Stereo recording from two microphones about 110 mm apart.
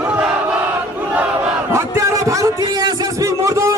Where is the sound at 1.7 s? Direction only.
25° right (ahead or behind).